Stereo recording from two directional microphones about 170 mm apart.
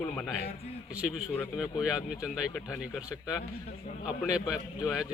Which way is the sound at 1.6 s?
5° right (ahead or behind).